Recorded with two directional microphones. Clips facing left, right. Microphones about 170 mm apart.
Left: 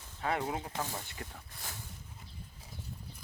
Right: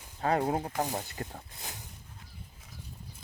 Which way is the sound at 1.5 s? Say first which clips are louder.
Right 2 dB; 20° right (ahead or behind).